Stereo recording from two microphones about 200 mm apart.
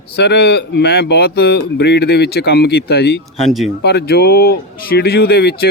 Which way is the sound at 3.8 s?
55° left (ahead or behind).